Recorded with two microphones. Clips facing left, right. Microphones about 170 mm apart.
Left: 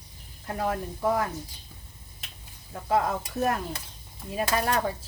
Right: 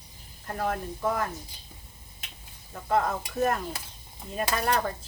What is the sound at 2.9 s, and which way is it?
Speech, 5° left (ahead or behind).